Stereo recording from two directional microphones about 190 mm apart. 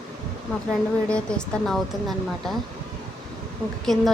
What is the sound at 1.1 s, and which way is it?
A woman's voice, 5° left (ahead or behind).